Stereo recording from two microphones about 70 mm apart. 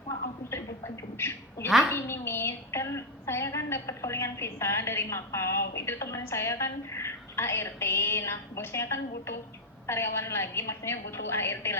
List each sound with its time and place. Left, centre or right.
1.2 s a woman's voice: left